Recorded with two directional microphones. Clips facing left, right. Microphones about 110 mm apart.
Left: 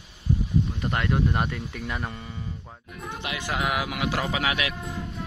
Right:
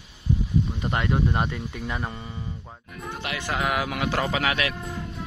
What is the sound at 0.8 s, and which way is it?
Speech, 10° right (ahead or behind).